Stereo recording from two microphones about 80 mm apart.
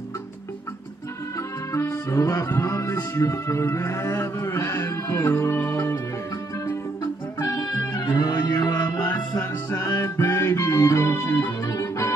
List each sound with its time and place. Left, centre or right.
1.7 s speech: left
7.3 s music: left
8.5 s music: left